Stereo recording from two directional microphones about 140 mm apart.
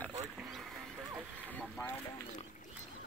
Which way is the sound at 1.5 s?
10° left (ahead or behind).